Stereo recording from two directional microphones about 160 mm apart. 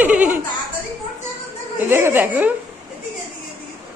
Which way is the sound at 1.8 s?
15° right (ahead or behind).